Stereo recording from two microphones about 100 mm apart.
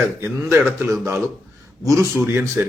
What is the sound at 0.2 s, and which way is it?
A man's voice, 25° right (ahead or behind).